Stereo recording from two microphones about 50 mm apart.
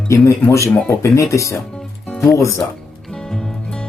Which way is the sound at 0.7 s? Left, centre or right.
Left.